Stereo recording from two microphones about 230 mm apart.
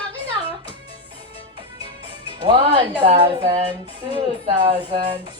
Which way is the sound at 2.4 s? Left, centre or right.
Right.